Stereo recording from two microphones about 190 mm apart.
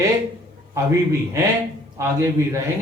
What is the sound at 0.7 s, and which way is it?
Speech, 15° right (ahead or behind).